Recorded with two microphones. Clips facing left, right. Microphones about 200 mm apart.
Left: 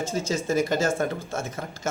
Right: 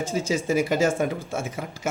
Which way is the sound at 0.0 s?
10° right (ahead or behind).